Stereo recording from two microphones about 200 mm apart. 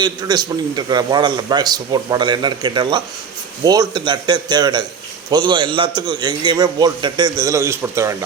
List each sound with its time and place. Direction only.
0.0 s a man's voice: 20° right (ahead or behind)